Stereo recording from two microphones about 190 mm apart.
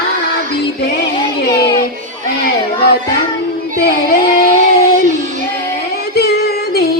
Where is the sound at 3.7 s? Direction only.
55° left (ahead or behind).